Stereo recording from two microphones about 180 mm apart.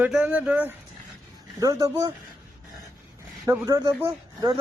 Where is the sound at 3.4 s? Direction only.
15° right (ahead or behind).